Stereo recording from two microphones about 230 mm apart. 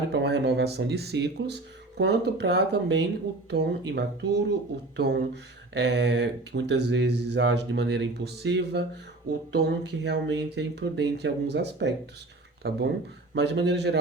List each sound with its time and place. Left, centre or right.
0.1 s speech: right